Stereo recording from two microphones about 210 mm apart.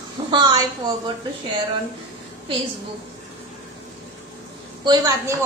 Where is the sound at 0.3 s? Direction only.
20° right (ahead or behind).